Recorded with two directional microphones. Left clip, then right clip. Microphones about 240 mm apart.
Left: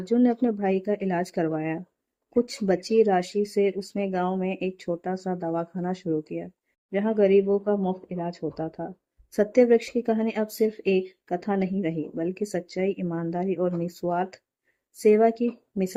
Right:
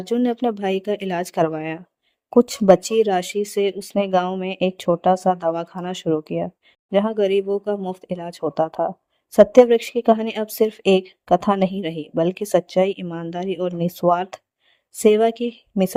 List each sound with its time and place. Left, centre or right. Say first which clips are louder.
0.0 s speech: right 3 dB; right